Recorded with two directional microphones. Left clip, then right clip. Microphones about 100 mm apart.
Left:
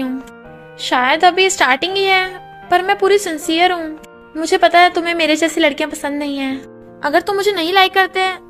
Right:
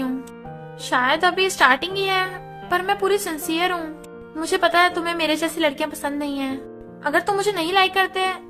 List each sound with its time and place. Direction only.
0.8 s a woman's voice: 40° left (ahead or behind)